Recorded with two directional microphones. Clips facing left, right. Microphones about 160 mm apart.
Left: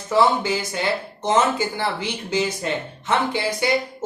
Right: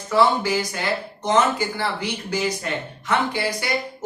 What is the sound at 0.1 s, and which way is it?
Speech, 25° left (ahead or behind).